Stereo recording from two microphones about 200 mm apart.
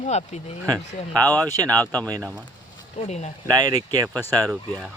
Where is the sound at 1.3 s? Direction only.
10° left (ahead or behind).